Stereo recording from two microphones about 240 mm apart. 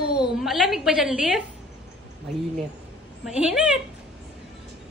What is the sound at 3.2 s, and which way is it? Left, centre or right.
Speech, centre.